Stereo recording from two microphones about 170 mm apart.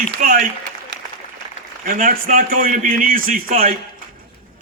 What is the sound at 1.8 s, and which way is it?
A man's voice, 55° right (ahead or behind).